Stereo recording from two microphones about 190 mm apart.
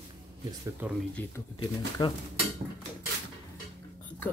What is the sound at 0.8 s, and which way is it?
Speech, 10° right (ahead or behind).